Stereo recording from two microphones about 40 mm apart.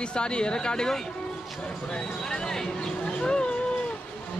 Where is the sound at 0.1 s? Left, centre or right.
Left.